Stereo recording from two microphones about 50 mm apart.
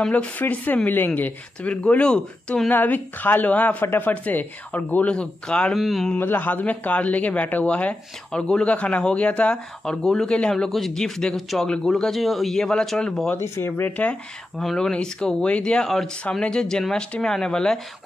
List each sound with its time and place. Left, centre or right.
0.1 s speech: left
2.0 s speech: centre
2.7 s speech: left
3.8 s speech: left
4.1 s speech: left
5.8 s speech: centre
6.1 s speech: left; by 10.5 s centre
10.5 s speech: centre
13.6 s speech: left
13.8 s speech: left
14.6 s speech: centre
14.9 s speech: centre